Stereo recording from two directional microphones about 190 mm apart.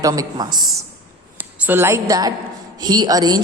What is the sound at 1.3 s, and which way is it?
A woman's voice, 10° right (ahead or behind).